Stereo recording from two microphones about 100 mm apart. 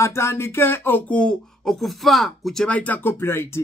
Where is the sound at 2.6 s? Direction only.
15° left (ahead or behind).